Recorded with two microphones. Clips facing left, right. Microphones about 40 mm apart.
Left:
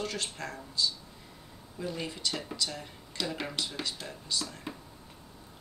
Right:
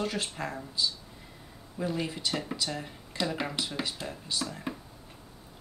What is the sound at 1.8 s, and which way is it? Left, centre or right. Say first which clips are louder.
Speech: right 3 dB; centre.